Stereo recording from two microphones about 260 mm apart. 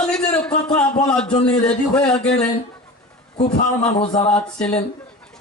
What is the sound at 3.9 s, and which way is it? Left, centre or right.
Speech, centre.